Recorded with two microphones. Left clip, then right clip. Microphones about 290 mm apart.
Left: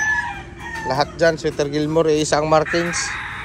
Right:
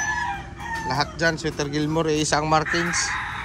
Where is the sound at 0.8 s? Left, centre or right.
Centre.